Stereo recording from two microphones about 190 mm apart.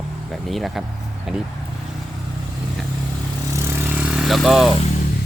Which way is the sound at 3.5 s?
15° right (ahead or behind).